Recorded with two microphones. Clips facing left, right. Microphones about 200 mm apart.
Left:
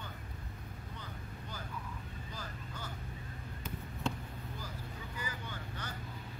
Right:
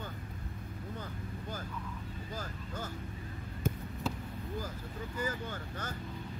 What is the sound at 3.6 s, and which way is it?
Basketball bounce, 50° right (ahead or behind).